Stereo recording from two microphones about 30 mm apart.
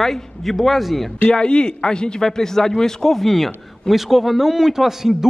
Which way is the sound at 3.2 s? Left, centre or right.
Centre.